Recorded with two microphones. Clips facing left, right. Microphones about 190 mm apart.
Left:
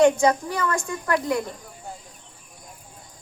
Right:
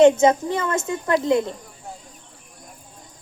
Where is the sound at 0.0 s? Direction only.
25° right (ahead or behind).